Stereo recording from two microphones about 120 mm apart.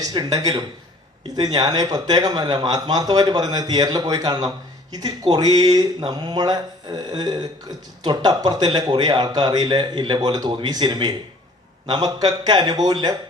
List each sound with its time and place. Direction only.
0.0 s speech: 30° right (ahead or behind)